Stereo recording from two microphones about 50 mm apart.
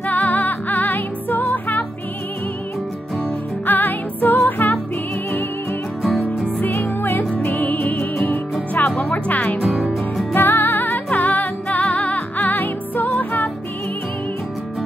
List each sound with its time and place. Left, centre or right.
0.0 s music: left
3.6 s music: left
7.0 s music: left
7.4 s music: left
9.6 s music: centre
10.3 s music: left
11.1 s music: left